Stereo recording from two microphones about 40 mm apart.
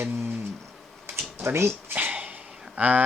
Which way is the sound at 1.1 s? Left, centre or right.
Right.